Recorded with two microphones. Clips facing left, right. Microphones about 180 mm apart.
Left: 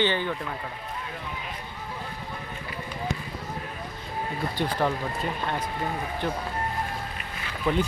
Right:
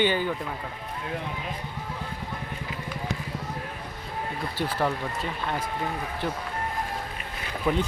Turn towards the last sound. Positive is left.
turn(degrees=-5)  # may be behind; listen again after turning